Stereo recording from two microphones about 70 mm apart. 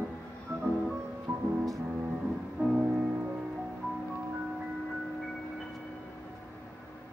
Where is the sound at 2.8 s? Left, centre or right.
Right.